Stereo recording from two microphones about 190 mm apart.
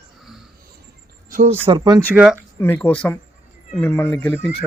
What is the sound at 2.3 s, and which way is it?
Speech, 10° left (ahead or behind).